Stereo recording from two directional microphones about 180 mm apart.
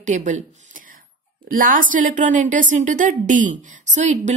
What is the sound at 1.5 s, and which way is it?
A woman's voice, 50° right (ahead or behind).